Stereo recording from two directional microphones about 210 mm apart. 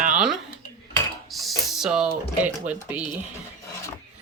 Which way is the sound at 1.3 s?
Centre (ahead or behind).